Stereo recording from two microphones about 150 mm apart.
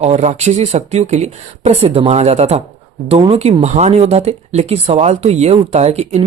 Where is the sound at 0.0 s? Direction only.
45° right (ahead or behind).